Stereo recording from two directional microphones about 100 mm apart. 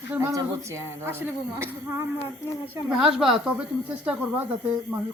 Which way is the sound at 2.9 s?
5° right (ahead or behind).